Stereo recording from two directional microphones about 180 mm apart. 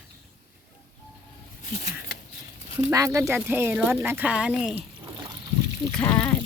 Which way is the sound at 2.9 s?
15° right (ahead or behind).